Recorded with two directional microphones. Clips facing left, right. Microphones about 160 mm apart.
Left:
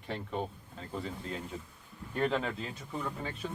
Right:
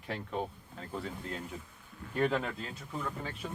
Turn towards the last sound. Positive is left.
turn(degrees=0)  # may be behind; listen again after turning